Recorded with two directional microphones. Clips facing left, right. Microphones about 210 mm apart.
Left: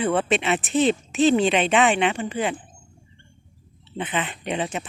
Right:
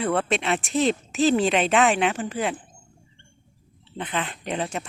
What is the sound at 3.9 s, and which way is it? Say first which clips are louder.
Speech: left 2 dB; 5° left (ahead or behind).